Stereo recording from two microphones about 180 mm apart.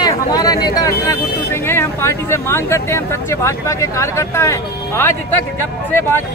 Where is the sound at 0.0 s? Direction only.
20° left (ahead or behind).